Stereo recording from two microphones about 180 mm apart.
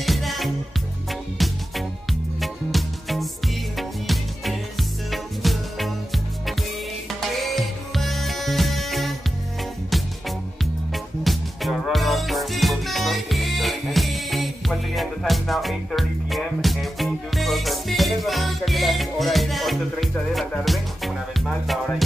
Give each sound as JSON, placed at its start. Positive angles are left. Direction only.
{"t": 0.0, "sound": "music", "side_deg": 0}
{"t": 10.6, "sound": "music", "side_deg": 0}